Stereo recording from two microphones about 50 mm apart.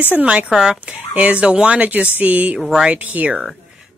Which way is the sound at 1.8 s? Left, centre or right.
Right.